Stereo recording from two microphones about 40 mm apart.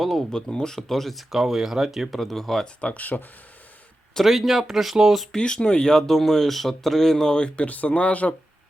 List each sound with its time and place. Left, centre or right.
0.5 s speech: centre
0.8 s speech: centre
1.3 s speech: centre
2.8 s speech: left
4.2 s speech: centre
5.3 s speech: centre
7.7 s speech: left